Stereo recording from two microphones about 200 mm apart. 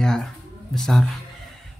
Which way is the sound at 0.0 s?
5° left (ahead or behind).